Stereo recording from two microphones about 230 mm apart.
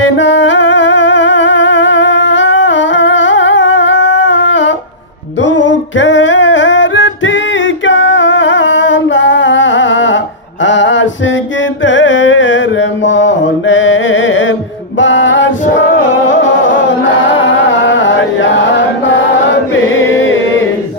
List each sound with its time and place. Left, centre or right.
0.2 s humming: left
5.4 s music: left
19.7 s chant: left